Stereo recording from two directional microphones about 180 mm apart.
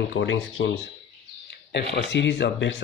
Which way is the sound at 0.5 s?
90° left.